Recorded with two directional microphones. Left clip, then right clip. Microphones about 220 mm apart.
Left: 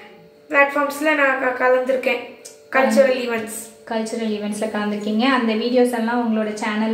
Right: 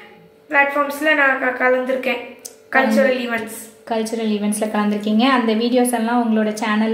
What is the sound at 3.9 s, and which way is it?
A woman's voice, 40° right (ahead or behind).